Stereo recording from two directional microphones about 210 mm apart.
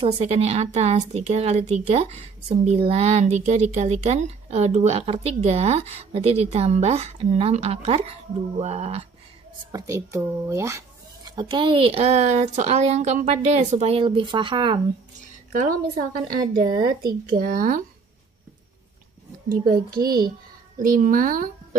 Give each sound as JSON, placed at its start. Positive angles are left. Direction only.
{"t": 0.0, "sound": "a woman's voice", "side_deg": -30}
{"t": 9.7, "sound": "speech", "side_deg": -15}
{"t": 15.5, "sound": "a woman's voice", "side_deg": -40}
{"t": 20.0, "sound": "speech", "side_deg": -20}
{"t": 20.7, "sound": "a woman's voice", "side_deg": -40}